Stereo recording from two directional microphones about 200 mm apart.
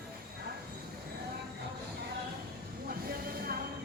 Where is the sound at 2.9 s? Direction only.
50° right (ahead or behind).